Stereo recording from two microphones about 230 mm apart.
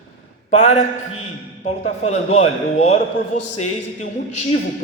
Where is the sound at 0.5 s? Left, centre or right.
Left.